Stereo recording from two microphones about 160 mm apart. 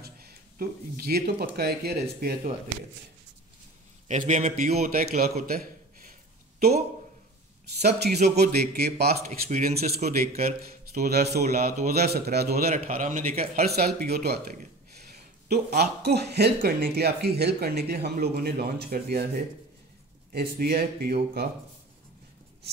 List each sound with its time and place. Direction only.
0.0 s speech: 70° right (ahead or behind)
4.1 s a man's voice: 50° right (ahead or behind)
4.6 s a man's voice: 65° right (ahead or behind)
5.5 s a sound: 65° right (ahead or behind)
7.8 s a man's voice: 90° right
9.5 s a man's voice: 65° right (ahead or behind); by 12.6 s 85° right
12.6 s a man's voice: 45° right (ahead or behind)
13.7 s speech: 80° right